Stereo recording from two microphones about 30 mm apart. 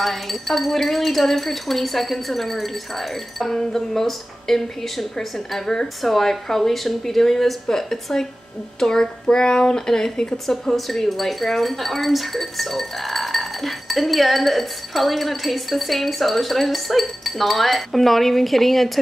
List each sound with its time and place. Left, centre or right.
0.0 s speech: centre
10.3 s speech: centre